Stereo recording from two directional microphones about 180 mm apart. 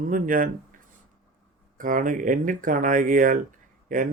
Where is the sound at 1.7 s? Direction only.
50° right (ahead or behind).